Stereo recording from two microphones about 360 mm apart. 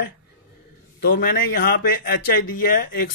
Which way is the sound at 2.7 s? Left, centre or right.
Left.